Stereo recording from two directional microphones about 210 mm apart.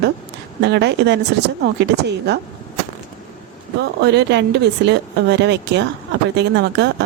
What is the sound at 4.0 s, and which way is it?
A woman's voice, 55° right (ahead or behind).